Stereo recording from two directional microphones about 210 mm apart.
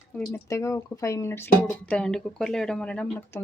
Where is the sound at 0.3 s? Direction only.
15° left (ahead or behind).